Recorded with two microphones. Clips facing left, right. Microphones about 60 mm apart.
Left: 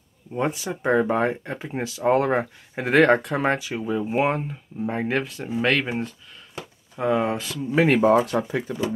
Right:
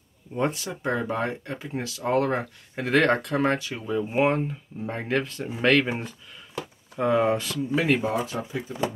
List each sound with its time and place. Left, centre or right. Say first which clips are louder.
0.3 s speech: left 1 dB; centre
0.7 s speech: left 6 dB; left; by 7.6 s centre
7.9 s speech: left 7 dB; left